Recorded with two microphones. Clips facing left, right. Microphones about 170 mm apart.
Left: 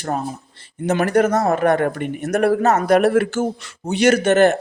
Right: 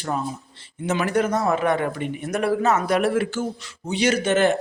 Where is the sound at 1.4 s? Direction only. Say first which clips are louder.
Left 4 dB; 50° left (ahead or behind).